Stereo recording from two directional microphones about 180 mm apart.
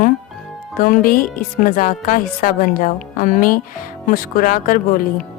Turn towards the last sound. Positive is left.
turn(degrees=50)  # may be behind; listen again after turning